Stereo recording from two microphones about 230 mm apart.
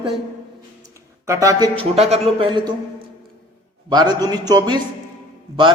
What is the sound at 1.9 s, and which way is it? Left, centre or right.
Speech, right.